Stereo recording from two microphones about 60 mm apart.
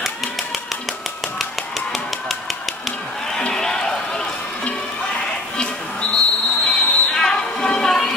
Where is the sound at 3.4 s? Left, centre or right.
Centre.